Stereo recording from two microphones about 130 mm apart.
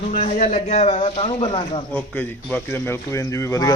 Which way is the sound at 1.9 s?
15° left (ahead or behind).